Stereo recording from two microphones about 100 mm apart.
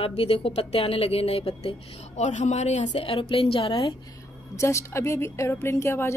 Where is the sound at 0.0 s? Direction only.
70° left (ahead or behind).